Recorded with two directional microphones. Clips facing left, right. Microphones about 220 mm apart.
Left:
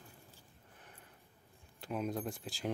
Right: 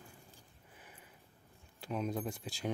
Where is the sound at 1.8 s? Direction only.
Centre (ahead or behind).